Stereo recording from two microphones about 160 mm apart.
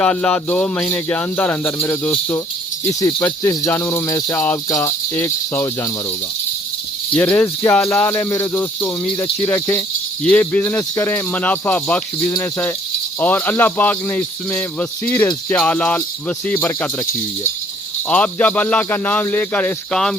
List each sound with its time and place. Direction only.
0.0 s speech: 5° left (ahead or behind)
7.1 s speech: 10° left (ahead or behind)
18.1 s speech: 10° left (ahead or behind)